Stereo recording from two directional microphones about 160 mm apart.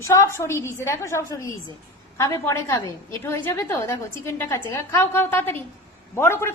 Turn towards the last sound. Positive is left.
turn(degrees=15)  # may be behind; listen again after turning